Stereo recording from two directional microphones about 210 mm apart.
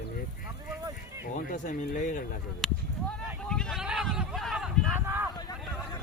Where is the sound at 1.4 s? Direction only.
35° left (ahead or behind).